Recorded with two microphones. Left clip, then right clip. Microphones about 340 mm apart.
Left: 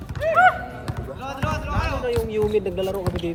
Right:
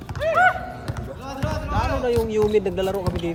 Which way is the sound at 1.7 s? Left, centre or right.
Centre.